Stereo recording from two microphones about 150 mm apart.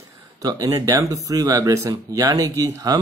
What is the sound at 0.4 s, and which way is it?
Speech, 20° right (ahead or behind).